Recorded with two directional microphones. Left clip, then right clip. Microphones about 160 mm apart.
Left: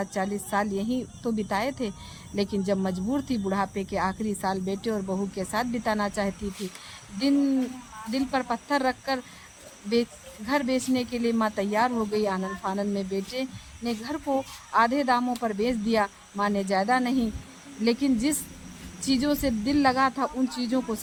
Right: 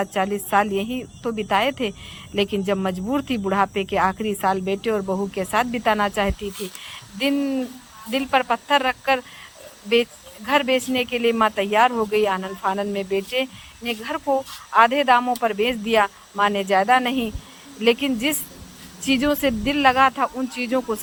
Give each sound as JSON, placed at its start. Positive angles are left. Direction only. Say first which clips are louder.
{"t": 0.0, "sound": "speech", "louder": "right 7 dB", "side_deg": -20}
{"t": 8.1, "sound": "speech", "louder": "right 8 dB", "side_deg": -15}
{"t": 15.3, "sound": "speech", "louder": "right 7 dB", "side_deg": -25}